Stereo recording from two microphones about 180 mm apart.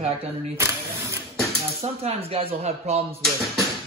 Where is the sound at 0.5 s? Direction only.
15° right (ahead or behind).